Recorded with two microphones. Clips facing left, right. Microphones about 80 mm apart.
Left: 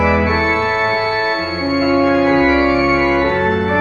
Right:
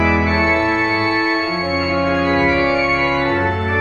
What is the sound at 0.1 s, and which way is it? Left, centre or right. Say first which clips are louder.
Organ: left 1 dB; left.